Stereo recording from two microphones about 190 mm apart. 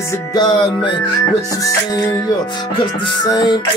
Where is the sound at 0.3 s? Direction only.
20° left (ahead or behind).